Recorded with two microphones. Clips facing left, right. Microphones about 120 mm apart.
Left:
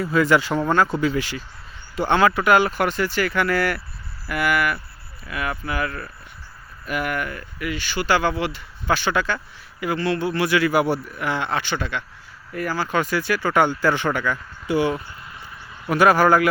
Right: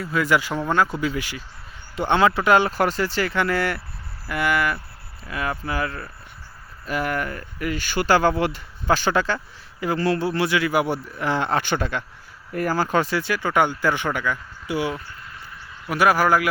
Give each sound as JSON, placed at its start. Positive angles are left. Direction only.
{"t": 0.0, "sound": "speech", "side_deg": 0}
{"t": 2.0, "sound": "speech", "side_deg": -20}
{"t": 11.1, "sound": "speech", "side_deg": -35}